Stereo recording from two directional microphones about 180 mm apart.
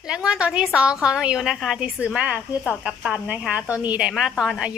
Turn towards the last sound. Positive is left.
turn(degrees=-5)  # may be behind; listen again after turning